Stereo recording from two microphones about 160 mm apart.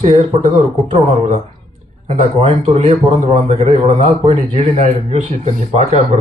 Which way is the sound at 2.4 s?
40° right (ahead or behind).